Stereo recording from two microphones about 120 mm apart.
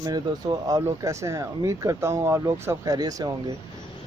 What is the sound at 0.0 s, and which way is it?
Speech, 30° right (ahead or behind).